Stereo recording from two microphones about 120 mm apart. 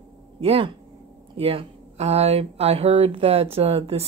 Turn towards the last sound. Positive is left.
turn(degrees=-55)  # may be behind; listen again after turning